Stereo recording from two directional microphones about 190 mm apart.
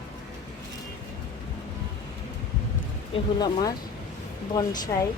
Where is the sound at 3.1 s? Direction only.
20° left (ahead or behind).